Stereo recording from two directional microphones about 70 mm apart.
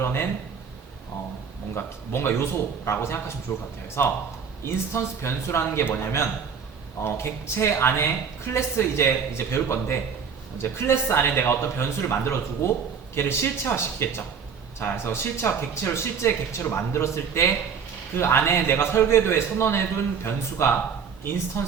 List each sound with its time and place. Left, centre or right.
0.0 s speech: left
1.7 s speech: left